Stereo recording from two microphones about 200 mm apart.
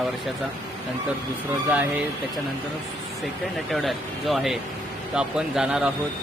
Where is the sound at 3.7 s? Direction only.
Centre (ahead or behind).